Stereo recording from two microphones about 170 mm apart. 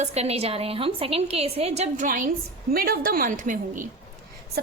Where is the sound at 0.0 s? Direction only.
40° right (ahead or behind).